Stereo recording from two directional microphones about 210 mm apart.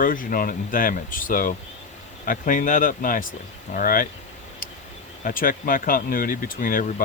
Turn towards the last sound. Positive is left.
turn(degrees=40)  # may be behind; listen again after turning